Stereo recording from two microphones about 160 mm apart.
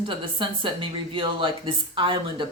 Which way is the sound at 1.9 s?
30° right (ahead or behind).